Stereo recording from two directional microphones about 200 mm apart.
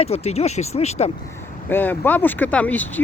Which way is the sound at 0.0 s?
30° left (ahead or behind).